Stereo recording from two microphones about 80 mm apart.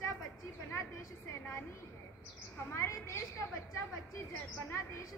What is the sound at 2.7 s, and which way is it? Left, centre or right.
Speech, left.